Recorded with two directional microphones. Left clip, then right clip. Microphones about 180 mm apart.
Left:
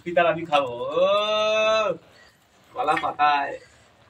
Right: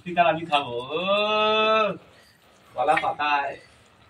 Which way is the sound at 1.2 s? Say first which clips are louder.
Even; 45° left (ahead or behind).